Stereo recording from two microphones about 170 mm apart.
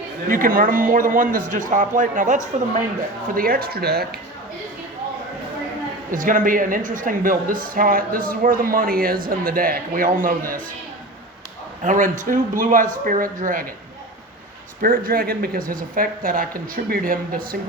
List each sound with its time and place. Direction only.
0.3 s a man's voice: 55° right (ahead or behind)
3.3 s a woman's voice: 60° right (ahead or behind)
6.1 s a woman's voice: 55° right (ahead or behind)
11.8 s a man's voice: 50° right (ahead or behind)
14.8 s a woman's voice: 55° right (ahead or behind)